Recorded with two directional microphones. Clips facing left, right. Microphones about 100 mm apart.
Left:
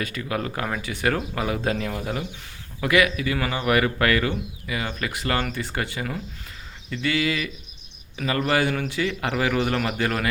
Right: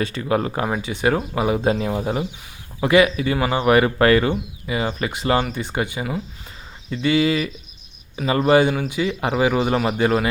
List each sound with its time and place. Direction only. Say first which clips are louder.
0.0 s speech: right 6 dB; 30° right (ahead or behind)